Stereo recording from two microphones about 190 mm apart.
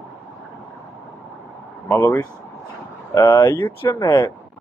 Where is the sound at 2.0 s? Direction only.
20° left (ahead or behind).